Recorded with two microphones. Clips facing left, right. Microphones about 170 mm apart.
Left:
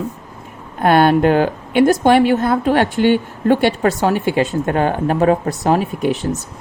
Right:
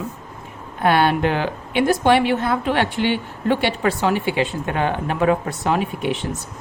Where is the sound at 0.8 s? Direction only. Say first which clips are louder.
Left 5 dB; 45° left (ahead or behind).